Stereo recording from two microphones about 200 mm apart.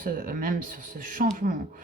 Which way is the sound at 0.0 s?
45° right (ahead or behind).